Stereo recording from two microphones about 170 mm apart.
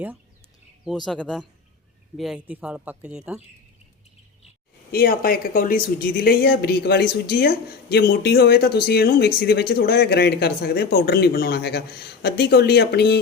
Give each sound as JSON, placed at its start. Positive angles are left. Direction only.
{"t": 1.0, "sound": "speech", "side_deg": 5}
{"t": 4.9, "sound": "speech", "side_deg": 60}